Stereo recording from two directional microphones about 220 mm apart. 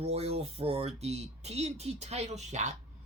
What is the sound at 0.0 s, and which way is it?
Speech, 30° right (ahead or behind).